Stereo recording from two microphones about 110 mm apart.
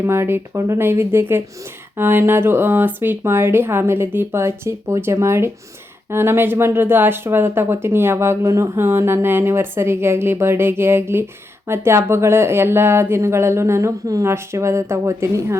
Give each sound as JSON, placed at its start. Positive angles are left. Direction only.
{"t": 0.0, "sound": "speech", "side_deg": -25}